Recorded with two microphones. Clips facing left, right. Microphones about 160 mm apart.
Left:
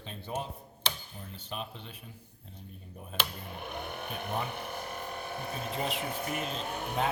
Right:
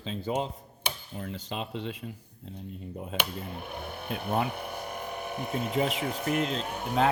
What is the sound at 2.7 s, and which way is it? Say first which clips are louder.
Chop: right 9 dB; 90° right.